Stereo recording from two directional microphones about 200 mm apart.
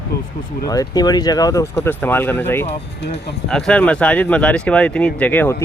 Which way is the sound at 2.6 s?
55° left (ahead or behind).